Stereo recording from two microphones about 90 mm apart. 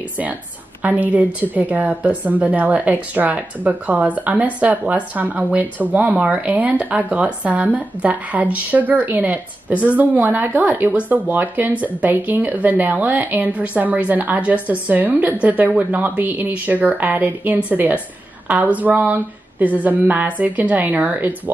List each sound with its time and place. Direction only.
0.8 s speech: 15° right (ahead or behind)